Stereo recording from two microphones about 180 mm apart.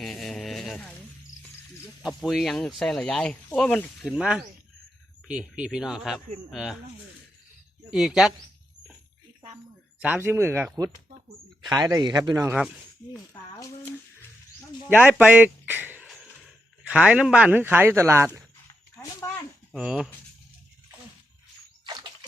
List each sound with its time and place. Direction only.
0.0 s a sound: centre (ahead or behind)
2.0 s speech: centre (ahead or behind)
4.1 s speech: 5° right (ahead or behind)
7.9 s speech: 5° right (ahead or behind)
10.0 s speech: 10° right (ahead or behind)
11.7 s speech: 20° right (ahead or behind)
14.8 s speech: 10° right (ahead or behind)
19.7 s speech: 5° right (ahead or behind)
21.8 s splash: 25° right (ahead or behind)